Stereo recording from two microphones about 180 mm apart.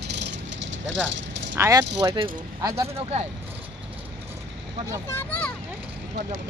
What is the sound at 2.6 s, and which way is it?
Speech, 15° right (ahead or behind).